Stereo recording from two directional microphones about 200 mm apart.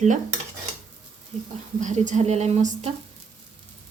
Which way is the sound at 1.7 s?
40° right (ahead or behind).